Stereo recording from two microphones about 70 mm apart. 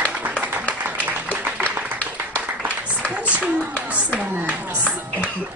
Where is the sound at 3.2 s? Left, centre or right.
Centre.